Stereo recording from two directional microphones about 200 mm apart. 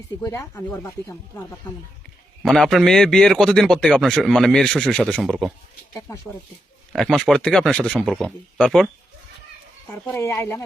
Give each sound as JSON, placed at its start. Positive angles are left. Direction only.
{"t": 0.2, "sound": "speech", "side_deg": 15}
{"t": 2.4, "sound": "a man's voice", "side_deg": 0}
{"t": 5.9, "sound": "speech", "side_deg": 15}
{"t": 6.9, "sound": "a man's voice", "side_deg": 0}
{"t": 10.1, "sound": "speech", "side_deg": 10}